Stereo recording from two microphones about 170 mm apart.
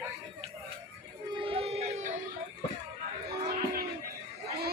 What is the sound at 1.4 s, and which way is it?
Music, 35° right (ahead or behind).